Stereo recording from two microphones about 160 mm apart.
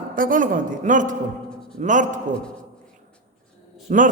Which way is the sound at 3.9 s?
55° right (ahead or behind).